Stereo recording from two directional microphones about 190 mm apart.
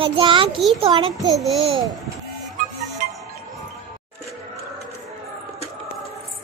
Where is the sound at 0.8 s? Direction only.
30° right (ahead or behind).